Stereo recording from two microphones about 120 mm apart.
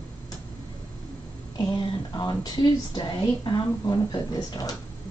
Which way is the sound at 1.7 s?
40° left (ahead or behind).